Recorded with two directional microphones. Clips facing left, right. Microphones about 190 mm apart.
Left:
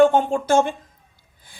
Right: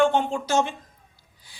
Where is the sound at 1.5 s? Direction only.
50° left (ahead or behind).